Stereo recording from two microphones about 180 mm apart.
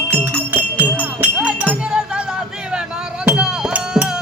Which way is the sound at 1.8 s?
5° right (ahead or behind).